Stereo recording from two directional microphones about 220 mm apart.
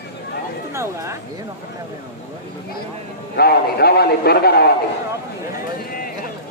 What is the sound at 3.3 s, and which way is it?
A man's voice, 45° left (ahead or behind).